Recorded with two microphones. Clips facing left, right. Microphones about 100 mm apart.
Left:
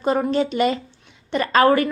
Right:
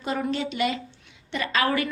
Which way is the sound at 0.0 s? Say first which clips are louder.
Left 8 dB; 40° left (ahead or behind).